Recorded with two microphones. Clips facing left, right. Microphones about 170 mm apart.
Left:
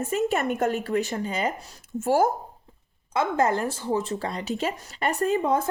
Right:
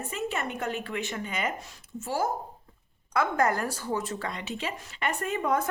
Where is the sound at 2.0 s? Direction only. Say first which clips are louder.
Left 8 dB; 50° left (ahead or behind).